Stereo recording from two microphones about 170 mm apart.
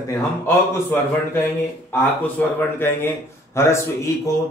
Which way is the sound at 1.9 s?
10° left (ahead or behind).